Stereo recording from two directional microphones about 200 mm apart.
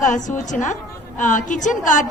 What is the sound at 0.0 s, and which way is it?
A woman's voice, 40° left (ahead or behind).